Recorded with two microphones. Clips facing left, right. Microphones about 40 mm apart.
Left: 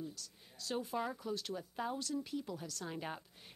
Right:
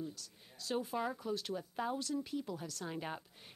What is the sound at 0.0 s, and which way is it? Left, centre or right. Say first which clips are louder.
Speech: right 2 dB; centre.